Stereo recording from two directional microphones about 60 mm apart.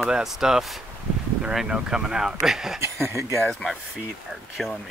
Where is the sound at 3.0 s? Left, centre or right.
Right.